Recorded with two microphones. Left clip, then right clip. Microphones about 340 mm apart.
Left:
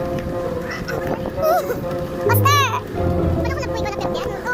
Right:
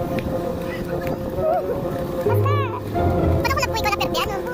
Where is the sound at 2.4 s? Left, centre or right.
Left.